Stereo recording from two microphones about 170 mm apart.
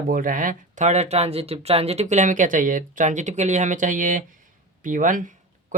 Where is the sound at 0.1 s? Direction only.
55° right (ahead or behind).